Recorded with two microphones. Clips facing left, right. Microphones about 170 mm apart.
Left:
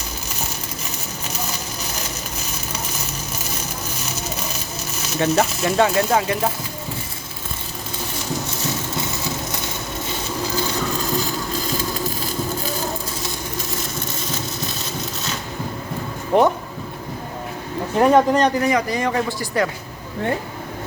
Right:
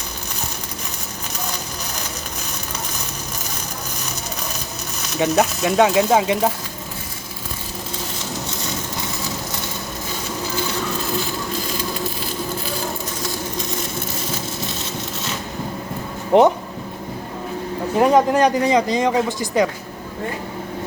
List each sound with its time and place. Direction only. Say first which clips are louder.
5.0 s speech: right 1 dB; centre (ahead or behind)
6.0 s speech: right 3 dB; 15° right (ahead or behind)
16.3 s speech: right 3 dB; 20° right (ahead or behind)
17.9 s speech: even; 5° right (ahead or behind)
18.6 s speech: right 3 dB; 20° right (ahead or behind)